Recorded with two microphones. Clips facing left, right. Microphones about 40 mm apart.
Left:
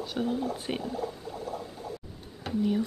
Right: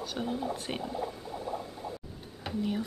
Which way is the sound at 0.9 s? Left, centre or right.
Right.